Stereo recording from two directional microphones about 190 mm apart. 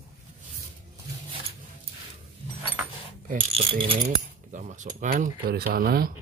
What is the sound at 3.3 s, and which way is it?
Speech, 30° right (ahead or behind).